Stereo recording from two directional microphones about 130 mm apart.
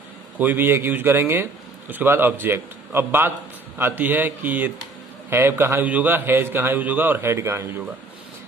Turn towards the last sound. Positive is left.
turn(degrees=-20)  # may be behind; listen again after turning